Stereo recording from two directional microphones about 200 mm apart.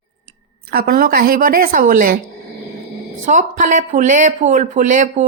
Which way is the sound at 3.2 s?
40° right (ahead or behind).